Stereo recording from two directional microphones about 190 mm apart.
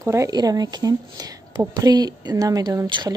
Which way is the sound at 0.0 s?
15° right (ahead or behind).